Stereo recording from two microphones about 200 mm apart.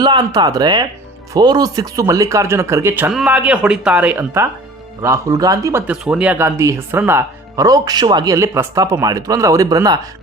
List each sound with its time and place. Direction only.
0.0 s speech: 20° right (ahead or behind)